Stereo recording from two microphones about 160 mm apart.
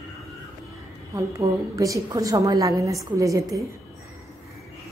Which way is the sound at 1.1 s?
20° right (ahead or behind).